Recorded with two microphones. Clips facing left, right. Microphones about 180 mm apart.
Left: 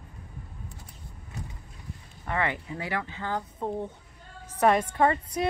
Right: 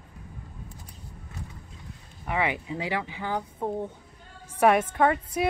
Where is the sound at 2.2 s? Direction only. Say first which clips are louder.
Right 1 dB; 15° right (ahead or behind).